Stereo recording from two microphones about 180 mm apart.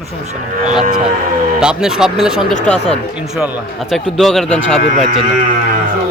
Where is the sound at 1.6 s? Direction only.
5° right (ahead or behind).